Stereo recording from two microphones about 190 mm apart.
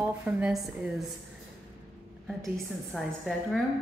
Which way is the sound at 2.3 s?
Centre (ahead or behind).